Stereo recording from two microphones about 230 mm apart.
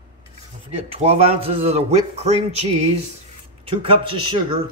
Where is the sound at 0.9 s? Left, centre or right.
Right.